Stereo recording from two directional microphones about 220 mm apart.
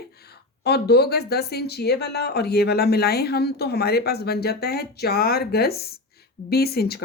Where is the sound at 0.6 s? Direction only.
45° left (ahead or behind).